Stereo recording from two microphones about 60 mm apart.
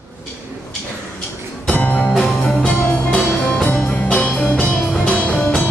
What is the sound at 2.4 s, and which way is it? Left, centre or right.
Music, centre.